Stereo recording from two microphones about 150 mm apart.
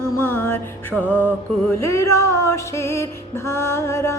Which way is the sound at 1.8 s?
20° left (ahead or behind).